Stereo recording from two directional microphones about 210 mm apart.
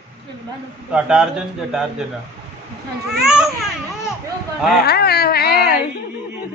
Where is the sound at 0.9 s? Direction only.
5° right (ahead or behind).